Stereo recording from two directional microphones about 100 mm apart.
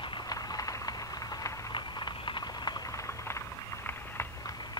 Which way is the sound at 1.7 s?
50° left (ahead or behind).